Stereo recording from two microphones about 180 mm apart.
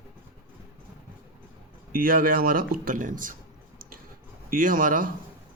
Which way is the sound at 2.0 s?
50° right (ahead or behind).